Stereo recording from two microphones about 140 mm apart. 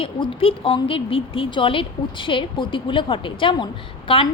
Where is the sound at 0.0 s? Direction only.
40° left (ahead or behind).